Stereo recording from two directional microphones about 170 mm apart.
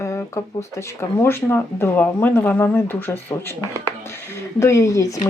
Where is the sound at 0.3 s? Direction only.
15° left (ahead or behind).